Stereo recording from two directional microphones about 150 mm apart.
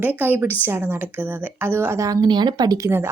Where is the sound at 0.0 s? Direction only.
10° right (ahead or behind).